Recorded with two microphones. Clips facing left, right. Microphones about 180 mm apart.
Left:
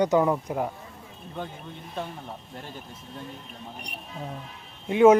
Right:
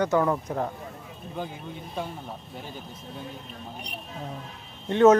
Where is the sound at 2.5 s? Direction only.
Centre (ahead or behind).